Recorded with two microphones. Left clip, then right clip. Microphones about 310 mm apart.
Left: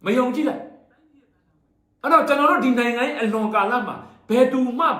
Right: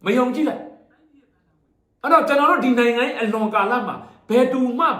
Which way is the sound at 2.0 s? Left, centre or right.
Centre.